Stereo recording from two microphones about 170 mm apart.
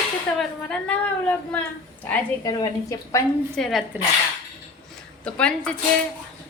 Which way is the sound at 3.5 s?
Centre (ahead or behind).